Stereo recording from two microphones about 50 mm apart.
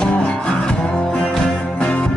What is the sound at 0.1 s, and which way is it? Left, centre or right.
Music, left.